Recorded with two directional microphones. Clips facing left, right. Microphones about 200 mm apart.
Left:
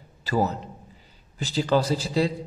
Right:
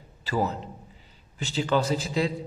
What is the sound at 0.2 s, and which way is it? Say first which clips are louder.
A man's voice: left 3 dB; 40° left (ahead or behind).